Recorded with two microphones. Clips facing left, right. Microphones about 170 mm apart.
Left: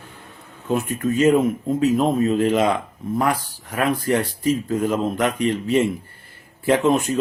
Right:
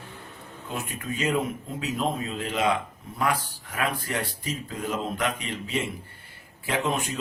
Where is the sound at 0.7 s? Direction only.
45° left (ahead or behind).